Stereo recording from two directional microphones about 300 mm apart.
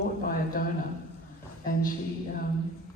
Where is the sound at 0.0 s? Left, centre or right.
Left.